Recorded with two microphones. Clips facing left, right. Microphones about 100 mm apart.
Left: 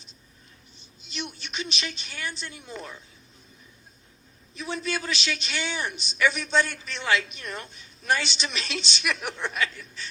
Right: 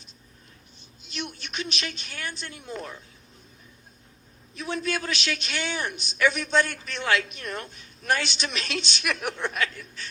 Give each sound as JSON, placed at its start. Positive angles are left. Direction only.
{"t": 0.8, "sound": "a woman's voice", "side_deg": -50}
{"t": 4.5, "sound": "a man's voice", "side_deg": -55}